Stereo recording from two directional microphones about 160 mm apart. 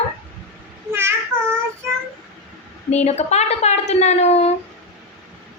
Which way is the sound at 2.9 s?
45° left (ahead or behind).